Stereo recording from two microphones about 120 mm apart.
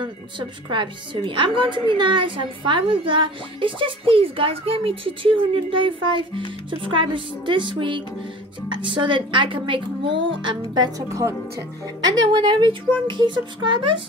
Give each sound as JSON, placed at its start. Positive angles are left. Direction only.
{"t": 0.7, "sound": "a woman's voice", "side_deg": -40}
{"t": 12.2, "sound": "speech", "side_deg": -40}